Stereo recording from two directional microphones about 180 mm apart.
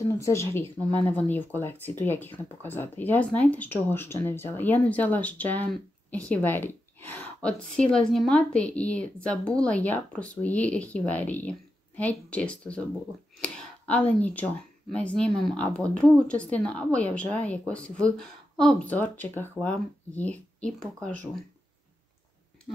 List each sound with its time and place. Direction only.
0.2 s speech: 15° left (ahead or behind)
13.4 s a sound: 10° left (ahead or behind)
14.9 s speech: 5° left (ahead or behind)